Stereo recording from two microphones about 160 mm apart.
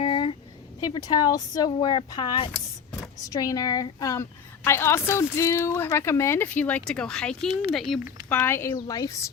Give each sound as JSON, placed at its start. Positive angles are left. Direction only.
{"t": 0.0, "sound": "a sound", "side_deg": 35}
{"t": 0.9, "sound": "a woman's voice", "side_deg": 25}
{"t": 8.3, "sound": "a woman's voice", "side_deg": 15}